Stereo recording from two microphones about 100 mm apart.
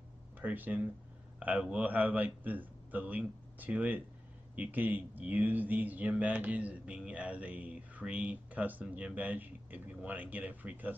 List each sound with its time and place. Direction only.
0.4 s speech: 15° right (ahead or behind)